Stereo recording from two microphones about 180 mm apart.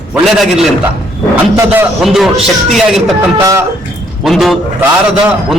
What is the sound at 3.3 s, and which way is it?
Speech, 20° right (ahead or behind).